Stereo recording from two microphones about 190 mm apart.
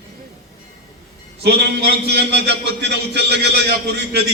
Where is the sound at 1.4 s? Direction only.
60° right (ahead or behind).